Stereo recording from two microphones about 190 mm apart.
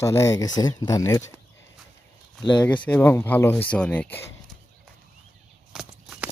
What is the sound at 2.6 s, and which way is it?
Speech, 5° left (ahead or behind).